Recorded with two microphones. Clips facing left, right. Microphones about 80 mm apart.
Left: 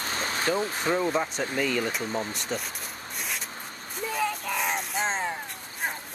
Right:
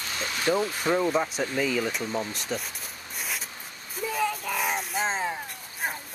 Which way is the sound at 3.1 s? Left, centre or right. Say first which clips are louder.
Right 1 dB; centre.